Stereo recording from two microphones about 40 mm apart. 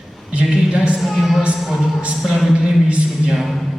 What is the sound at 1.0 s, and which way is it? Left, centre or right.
Speech, centre.